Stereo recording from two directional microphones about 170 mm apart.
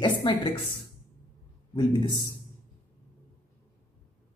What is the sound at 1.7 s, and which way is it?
Speech, 25° left (ahead or behind).